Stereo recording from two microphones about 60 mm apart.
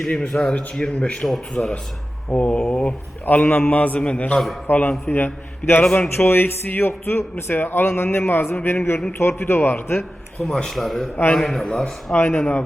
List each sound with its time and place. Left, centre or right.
0.0 s a man's voice: centre
4.6 s a man's voice: left
10.4 s speech: centre
12.1 s speech: left